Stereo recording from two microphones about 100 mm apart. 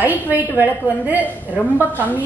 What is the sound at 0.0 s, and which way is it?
A woman's voice, 15° right (ahead or behind).